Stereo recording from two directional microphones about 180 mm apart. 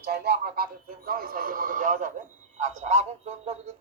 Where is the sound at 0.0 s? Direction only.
60° right (ahead or behind).